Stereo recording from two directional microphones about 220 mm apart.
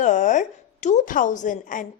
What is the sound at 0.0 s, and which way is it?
A woman's voice, 35° left (ahead or behind).